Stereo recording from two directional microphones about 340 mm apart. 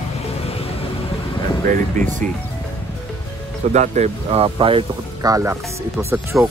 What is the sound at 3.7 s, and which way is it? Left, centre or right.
Speech, right.